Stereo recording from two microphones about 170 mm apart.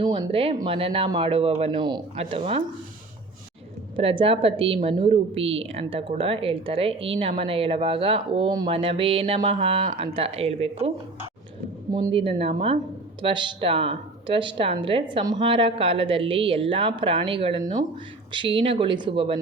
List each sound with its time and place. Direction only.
0.0 s a woman's voice: 30° right (ahead or behind)
3.9 s a woman's voice: 30° right (ahead or behind)
11.9 s a woman's voice: 25° right (ahead or behind)